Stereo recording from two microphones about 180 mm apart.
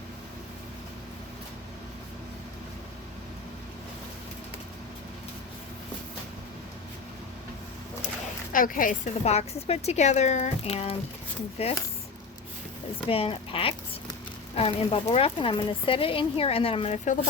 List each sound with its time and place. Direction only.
8.5 s a woman's voice: 50° left (ahead or behind)
13.1 s a woman's voice: 30° left (ahead or behind)